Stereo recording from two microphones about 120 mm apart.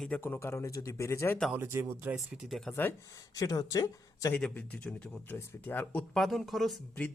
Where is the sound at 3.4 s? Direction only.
30° left (ahead or behind).